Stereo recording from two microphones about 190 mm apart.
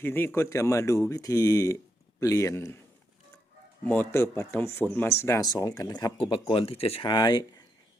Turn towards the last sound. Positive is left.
turn(degrees=20)  # may be behind; listen again after turning